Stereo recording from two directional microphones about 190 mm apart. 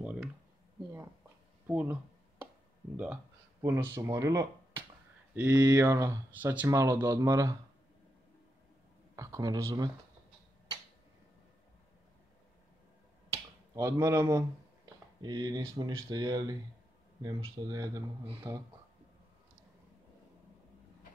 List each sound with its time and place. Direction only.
0.0 s a sound: 5° right (ahead or behind)
1.7 s speech: 10° right (ahead or behind)
3.6 s speech: 20° right (ahead or behind)
9.1 s speech: 15° right (ahead or behind)
13.3 s finger snapping: 15° right (ahead or behind)
14.9 s speech: 20° right (ahead or behind)